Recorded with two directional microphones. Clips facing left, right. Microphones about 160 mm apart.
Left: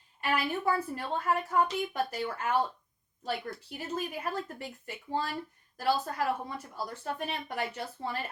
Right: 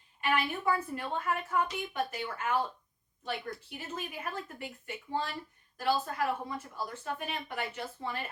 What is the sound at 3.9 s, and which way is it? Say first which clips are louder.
Speech: left 5 dB; 40° left (ahead or behind).